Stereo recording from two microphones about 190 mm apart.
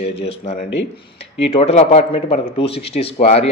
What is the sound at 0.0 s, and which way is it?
Speech, 35° left (ahead or behind).